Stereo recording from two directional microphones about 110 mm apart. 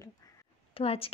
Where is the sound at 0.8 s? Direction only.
60° left (ahead or behind).